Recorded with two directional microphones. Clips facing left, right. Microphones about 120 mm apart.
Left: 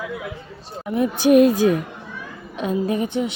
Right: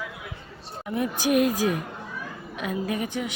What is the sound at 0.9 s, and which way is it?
Speech, 25° left (ahead or behind).